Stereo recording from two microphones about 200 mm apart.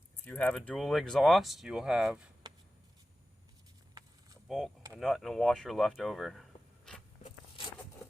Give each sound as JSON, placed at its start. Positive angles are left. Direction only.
{"t": 0.3, "sound": "speech", "side_deg": 5}
{"t": 4.4, "sound": "speech", "side_deg": 0}
{"t": 7.2, "sound": "walk", "side_deg": 30}